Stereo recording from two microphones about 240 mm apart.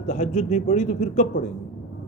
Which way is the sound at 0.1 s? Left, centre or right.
Left.